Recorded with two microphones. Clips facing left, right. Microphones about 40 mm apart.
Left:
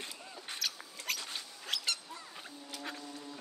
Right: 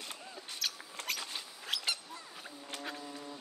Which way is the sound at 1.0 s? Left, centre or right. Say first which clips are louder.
Left 1 dB; centre.